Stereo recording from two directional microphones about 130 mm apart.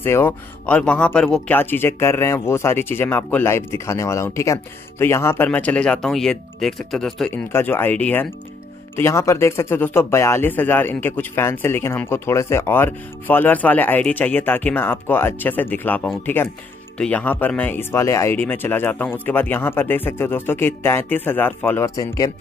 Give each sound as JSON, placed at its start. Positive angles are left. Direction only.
{"t": 0.0, "sound": "speech", "side_deg": 15}
{"t": 21.9, "sound": "speech", "side_deg": 25}